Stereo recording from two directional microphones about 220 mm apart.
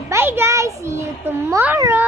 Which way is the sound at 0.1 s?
10° right (ahead or behind).